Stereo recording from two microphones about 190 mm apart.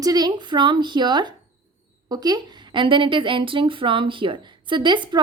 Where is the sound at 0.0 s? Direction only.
20° right (ahead or behind).